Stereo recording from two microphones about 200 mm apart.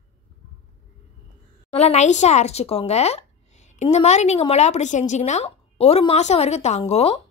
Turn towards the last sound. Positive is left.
turn(degrees=30)  # may be behind; listen again after turning